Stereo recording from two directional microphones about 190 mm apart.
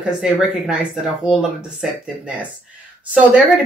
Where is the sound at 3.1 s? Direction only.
5° right (ahead or behind).